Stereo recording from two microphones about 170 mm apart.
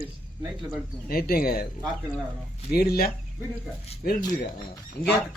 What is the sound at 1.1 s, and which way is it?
Speech, 60° left (ahead or behind).